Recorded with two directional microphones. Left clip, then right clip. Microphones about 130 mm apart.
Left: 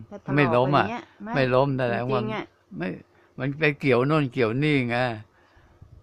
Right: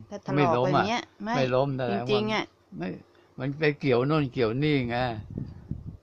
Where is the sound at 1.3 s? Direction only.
30° left (ahead or behind).